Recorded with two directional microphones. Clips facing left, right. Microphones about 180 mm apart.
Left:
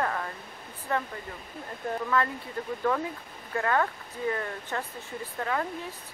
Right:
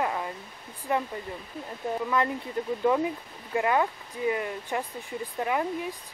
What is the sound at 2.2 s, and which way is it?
Speech, 20° right (ahead or behind).